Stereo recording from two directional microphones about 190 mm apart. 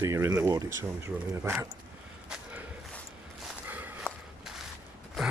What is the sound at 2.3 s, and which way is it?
Walk, 10° right (ahead or behind).